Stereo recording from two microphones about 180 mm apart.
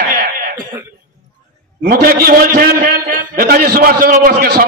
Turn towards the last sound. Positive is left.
turn(degrees=-55)  # may be behind; listen again after turning